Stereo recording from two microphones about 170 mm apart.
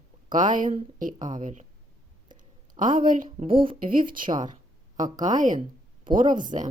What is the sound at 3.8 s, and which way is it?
Speech, 55° right (ahead or behind).